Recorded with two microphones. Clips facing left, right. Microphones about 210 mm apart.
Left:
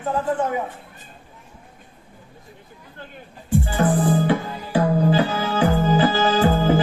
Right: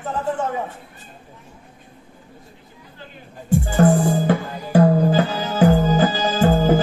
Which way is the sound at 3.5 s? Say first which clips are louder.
Right 4 dB; 45° right (ahead or behind).